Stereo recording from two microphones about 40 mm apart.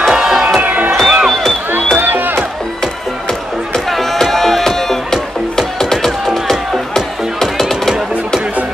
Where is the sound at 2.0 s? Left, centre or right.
Right.